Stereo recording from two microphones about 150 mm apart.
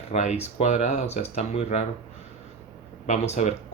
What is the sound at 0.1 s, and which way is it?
Speech, 50° left (ahead or behind).